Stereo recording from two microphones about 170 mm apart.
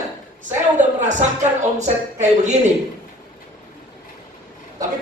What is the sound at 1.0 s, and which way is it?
Speech, 45° right (ahead or behind).